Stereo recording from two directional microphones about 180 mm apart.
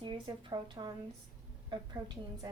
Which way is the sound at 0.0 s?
25° right (ahead or behind).